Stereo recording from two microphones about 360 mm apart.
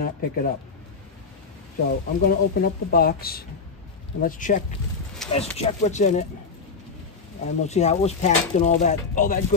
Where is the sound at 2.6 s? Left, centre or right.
Left.